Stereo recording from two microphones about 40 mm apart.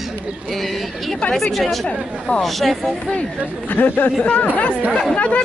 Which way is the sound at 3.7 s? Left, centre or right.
Left.